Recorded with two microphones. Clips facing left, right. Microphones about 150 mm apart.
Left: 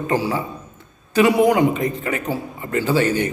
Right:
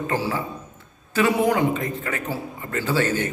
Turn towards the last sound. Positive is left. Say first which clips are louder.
# left 4 dB
turn(degrees=15)  # may be behind; listen again after turning